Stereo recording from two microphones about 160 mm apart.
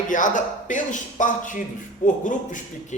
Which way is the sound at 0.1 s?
55° left (ahead or behind).